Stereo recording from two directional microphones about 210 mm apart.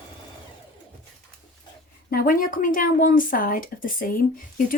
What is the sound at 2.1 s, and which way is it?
A woman's voice, 40° left (ahead or behind).